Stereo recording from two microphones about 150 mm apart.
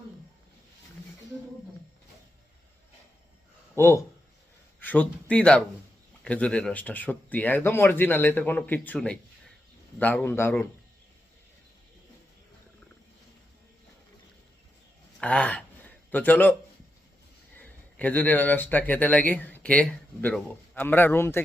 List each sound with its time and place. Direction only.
3.8 s speech: 15° left (ahead or behind)
15.2 s gasp: 10° left (ahead or behind)
17.6 s speech: 10° left (ahead or behind)